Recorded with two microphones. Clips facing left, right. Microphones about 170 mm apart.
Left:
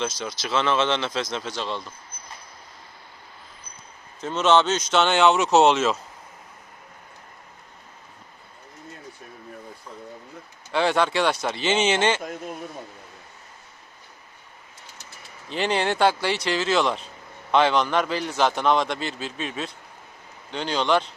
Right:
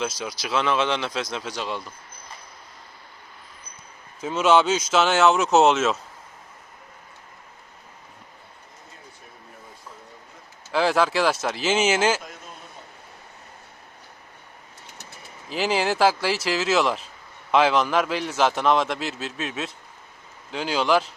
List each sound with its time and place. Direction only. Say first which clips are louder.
0.0 s speech: even; 10° right (ahead or behind)
4.2 s a man's voice: right 1 dB; 10° right (ahead or behind)
10.7 s a man's voice: right 1 dB; centre (ahead or behind)
15.4 s a man's voice: right 1 dB; 5° right (ahead or behind)